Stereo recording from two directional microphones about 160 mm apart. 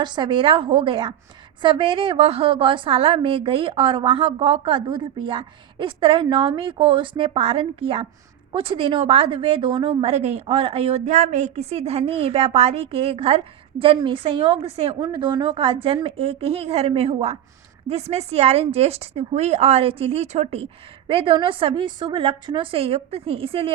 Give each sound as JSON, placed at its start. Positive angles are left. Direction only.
{"t": 0.0, "sound": "a woman's voice", "side_deg": -30}